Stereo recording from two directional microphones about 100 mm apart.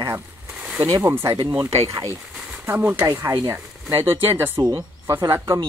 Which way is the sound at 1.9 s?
35° right (ahead or behind).